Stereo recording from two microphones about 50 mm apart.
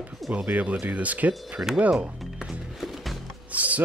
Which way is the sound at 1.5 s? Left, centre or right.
Centre.